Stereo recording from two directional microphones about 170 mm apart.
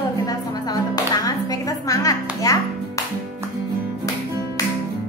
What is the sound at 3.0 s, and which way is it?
Music, 20° left (ahead or behind).